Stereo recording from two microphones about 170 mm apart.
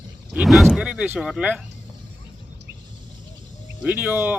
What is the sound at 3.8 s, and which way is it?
Speech, 10° right (ahead or behind).